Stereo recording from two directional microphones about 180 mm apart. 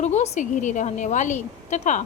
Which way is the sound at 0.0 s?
40° left (ahead or behind).